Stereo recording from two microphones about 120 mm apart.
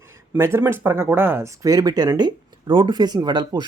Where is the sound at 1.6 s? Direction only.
35° right (ahead or behind).